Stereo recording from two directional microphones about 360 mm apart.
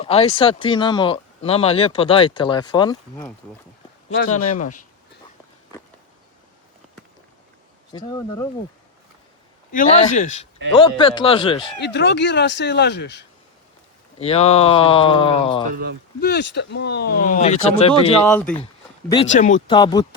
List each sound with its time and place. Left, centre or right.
0.0 s speech: centre
4.1 s speech: left
7.9 s speech: centre
9.7 s speech: left
11.8 s speech: left
14.2 s speech: centre
16.2 s speech: left
18.3 s speech: centre
19.0 s speech: centre